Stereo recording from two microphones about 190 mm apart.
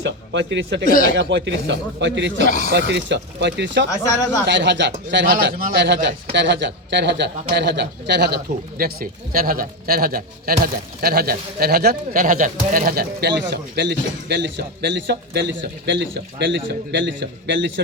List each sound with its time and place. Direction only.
0.0 s speech: 70° right (ahead or behind)
5.2 s speech: 50° right (ahead or behind)
5.8 s a man's voice: 65° right (ahead or behind)
8.8 s a man's voice: 50° right (ahead or behind); by 17.8 s 70° right (ahead or behind)